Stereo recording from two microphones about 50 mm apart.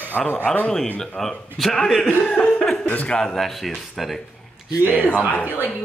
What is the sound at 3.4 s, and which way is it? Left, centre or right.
Speech, centre.